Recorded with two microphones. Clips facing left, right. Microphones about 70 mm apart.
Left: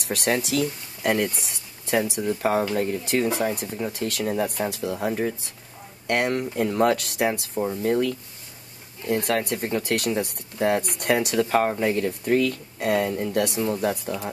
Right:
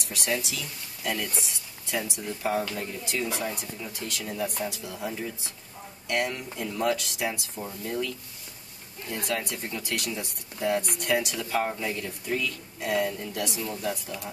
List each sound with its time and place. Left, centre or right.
0.0 s speech: left
1.4 s a sound: left
2.7 s speech: left
9.2 s speech: left